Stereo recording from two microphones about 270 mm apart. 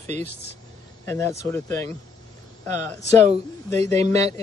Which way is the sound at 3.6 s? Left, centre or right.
Centre.